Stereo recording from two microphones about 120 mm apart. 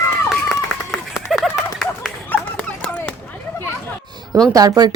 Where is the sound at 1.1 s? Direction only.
Centre (ahead or behind).